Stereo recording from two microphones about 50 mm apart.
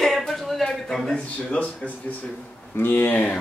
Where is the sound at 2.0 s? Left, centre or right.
Left.